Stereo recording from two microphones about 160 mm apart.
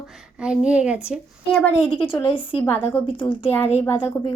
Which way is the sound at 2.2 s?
30° left (ahead or behind).